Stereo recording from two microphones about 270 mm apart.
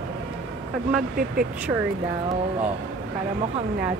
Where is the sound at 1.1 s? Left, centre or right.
Right.